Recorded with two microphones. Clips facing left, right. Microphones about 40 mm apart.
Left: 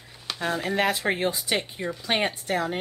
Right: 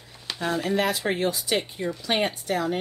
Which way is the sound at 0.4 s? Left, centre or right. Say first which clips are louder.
Right 1 dB; left.